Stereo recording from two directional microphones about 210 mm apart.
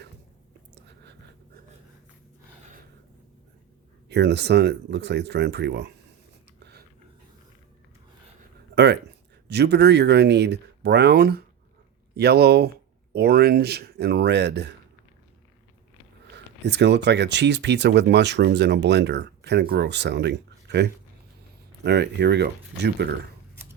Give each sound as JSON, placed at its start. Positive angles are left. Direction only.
{"t": 4.1, "sound": "speech", "side_deg": -55}
{"t": 8.7, "sound": "a sound", "side_deg": -55}
{"t": 9.5, "sound": "speech", "side_deg": -50}
{"t": 16.3, "sound": "speech", "side_deg": -55}